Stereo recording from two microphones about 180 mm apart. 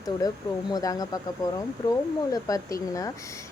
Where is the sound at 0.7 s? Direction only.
20° left (ahead or behind).